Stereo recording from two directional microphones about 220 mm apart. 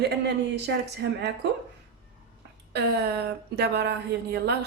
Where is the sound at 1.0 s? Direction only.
55° right (ahead or behind).